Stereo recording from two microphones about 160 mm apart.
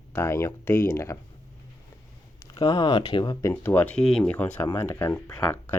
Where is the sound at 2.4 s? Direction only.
20° left (ahead or behind).